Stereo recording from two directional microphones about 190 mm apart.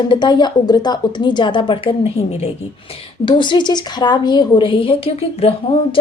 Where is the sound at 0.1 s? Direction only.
25° left (ahead or behind).